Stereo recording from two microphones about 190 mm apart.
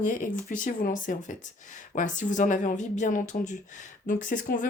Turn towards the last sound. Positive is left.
turn(degrees=45)  # may be behind; listen again after turning